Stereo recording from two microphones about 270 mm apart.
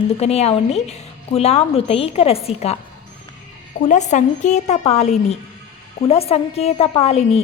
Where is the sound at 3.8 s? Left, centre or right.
Left.